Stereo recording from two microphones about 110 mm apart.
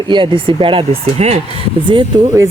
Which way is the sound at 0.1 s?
50° right (ahead or behind).